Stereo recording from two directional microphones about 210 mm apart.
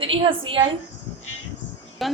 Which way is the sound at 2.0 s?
Centre (ahead or behind).